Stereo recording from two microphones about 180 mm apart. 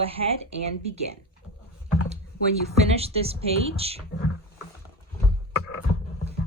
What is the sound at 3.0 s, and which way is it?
Speech, 35° right (ahead or behind).